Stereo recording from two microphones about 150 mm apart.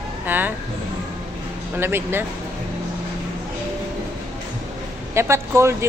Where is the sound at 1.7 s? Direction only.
15° right (ahead or behind).